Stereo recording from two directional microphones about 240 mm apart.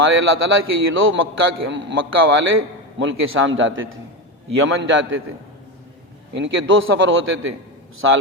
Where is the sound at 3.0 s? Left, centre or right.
Right.